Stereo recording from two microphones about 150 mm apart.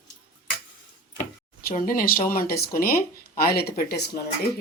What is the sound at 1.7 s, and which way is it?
Speech, 70° left (ahead or behind).